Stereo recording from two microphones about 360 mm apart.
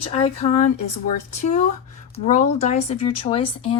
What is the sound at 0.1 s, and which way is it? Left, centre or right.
Speech, centre.